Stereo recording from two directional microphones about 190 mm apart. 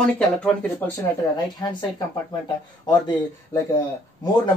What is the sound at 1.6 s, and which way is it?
Speech, 20° left (ahead or behind).